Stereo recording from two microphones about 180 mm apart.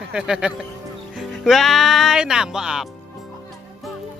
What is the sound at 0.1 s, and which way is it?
Speech, 5° right (ahead or behind).